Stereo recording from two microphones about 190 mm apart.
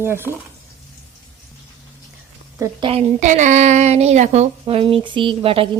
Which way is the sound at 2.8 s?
30° right (ahead or behind).